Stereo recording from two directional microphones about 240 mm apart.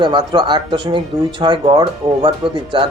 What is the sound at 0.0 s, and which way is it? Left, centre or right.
Speech, centre.